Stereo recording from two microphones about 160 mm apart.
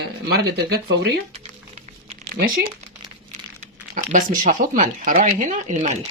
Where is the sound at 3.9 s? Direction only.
55° right (ahead or behind).